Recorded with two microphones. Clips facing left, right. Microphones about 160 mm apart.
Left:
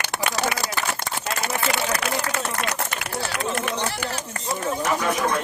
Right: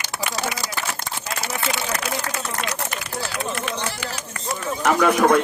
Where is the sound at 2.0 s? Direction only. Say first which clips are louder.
Left 2 dB; 60° left (ahead or behind).